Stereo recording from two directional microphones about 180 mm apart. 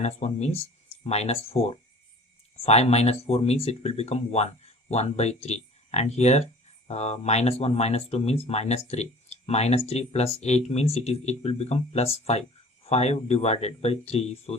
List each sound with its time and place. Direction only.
0.0 s speech: 40° left (ahead or behind)